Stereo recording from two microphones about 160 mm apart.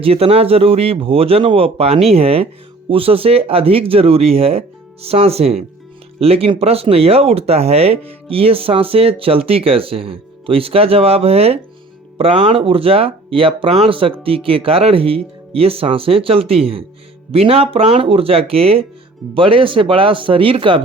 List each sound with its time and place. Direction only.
0.0 s speech: 35° right (ahead or behind)